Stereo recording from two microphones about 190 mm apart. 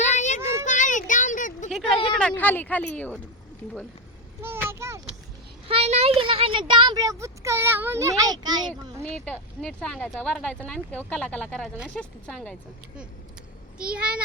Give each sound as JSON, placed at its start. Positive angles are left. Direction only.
{"t": 0.1, "sound": "child singing", "side_deg": 40}
{"t": 0.6, "sound": "a sound", "side_deg": 40}
{"t": 2.1, "sound": "speech", "side_deg": 5}
{"t": 4.4, "sound": "a child's voice", "side_deg": -10}
{"t": 5.6, "sound": "speech", "side_deg": -30}
{"t": 9.0, "sound": "speech", "side_deg": 5}
{"t": 13.7, "sound": "speech", "side_deg": -5}